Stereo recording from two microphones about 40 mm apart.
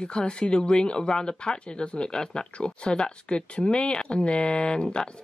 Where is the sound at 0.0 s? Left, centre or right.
Left.